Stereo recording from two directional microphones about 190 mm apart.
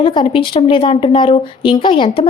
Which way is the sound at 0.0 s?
25° left (ahead or behind).